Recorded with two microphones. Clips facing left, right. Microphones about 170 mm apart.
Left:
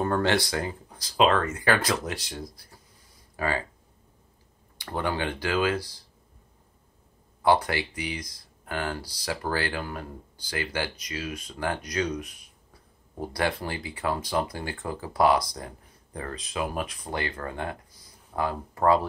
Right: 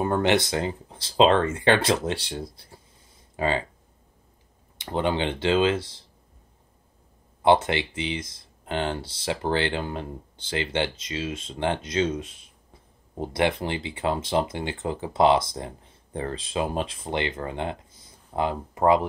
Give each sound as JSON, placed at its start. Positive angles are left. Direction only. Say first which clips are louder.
{"t": 0.0, "sound": "speech", "louder": "right 2 dB", "side_deg": -20}
{"t": 4.7, "sound": "speech", "louder": "right 4 dB", "side_deg": -20}
{"t": 7.4, "sound": "speech", "louder": "right 3 dB", "side_deg": -25}